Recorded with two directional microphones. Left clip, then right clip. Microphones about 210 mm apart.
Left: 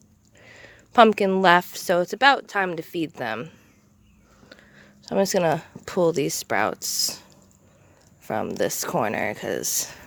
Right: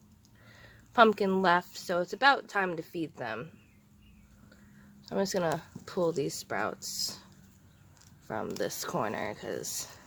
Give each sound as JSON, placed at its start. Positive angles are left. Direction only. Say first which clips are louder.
{"t": 0.4, "sound": "a woman's voice", "louder": "left 9 dB", "side_deg": 30}
{"t": 5.0, "sound": "a woman's voice", "louder": "left 9 dB", "side_deg": 30}
{"t": 8.3, "sound": "a woman's voice", "louder": "left 9 dB", "side_deg": 30}